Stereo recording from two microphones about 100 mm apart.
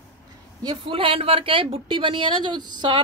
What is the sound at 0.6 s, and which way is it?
Speech, 60° right (ahead or behind).